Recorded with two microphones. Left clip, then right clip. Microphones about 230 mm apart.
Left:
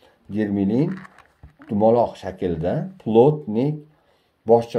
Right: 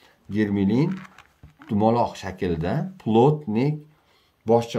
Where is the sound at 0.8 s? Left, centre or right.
Centre.